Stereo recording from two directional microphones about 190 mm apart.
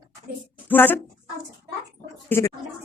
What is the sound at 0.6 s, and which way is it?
Speech, 10° left (ahead or behind).